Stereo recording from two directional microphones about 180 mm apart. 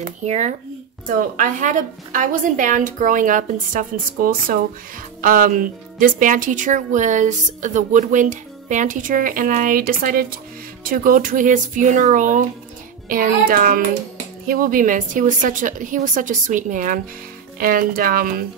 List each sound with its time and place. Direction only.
0.2 s a woman's voice: 40° right (ahead or behind)